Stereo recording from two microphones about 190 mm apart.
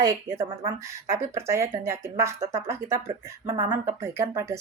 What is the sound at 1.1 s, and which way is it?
Speech, 15° right (ahead or behind).